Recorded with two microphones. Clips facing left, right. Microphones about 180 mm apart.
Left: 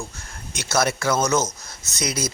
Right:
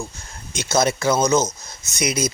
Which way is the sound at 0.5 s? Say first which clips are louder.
Right 3 dB; 20° right (ahead or behind).